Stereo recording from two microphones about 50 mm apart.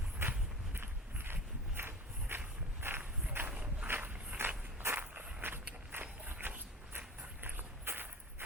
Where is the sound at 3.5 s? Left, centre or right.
Right.